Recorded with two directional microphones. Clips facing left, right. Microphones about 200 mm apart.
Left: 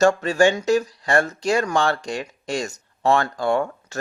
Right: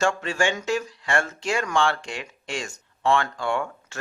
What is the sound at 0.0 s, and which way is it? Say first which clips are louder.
Speech: left 7 dB; 40° left (ahead or behind).